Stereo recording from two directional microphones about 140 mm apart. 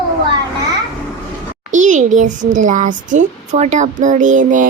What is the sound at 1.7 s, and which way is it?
A child's voice, 60° right (ahead or behind).